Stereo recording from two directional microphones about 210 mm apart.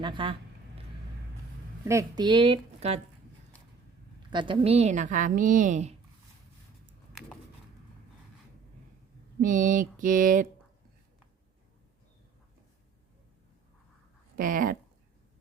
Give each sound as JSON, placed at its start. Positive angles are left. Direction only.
{"t": 0.0, "sound": "speech", "side_deg": -25}
{"t": 1.8, "sound": "speech", "side_deg": -15}
{"t": 4.3, "sound": "a woman's voice", "side_deg": -25}
{"t": 7.1, "sound": "a sound", "side_deg": 0}
{"t": 9.4, "sound": "a woman's voice", "side_deg": -40}
{"t": 14.3, "sound": "a woman's voice", "side_deg": -40}